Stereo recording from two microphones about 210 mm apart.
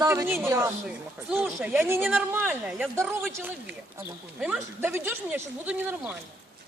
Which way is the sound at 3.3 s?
15° right (ahead or behind).